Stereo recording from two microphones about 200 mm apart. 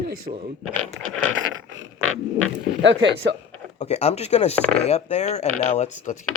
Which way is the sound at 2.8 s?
60° right (ahead or behind).